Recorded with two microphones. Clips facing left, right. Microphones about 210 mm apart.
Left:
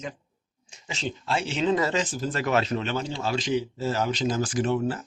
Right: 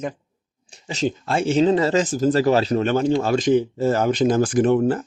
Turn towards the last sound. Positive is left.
turn(degrees=-55)  # may be behind; listen again after turning